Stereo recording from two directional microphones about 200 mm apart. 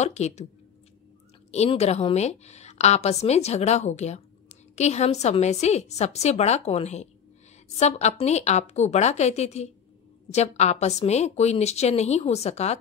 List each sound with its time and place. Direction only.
0.0 s a woman's voice: 35° left (ahead or behind)
1.5 s a woman's voice: 35° left (ahead or behind)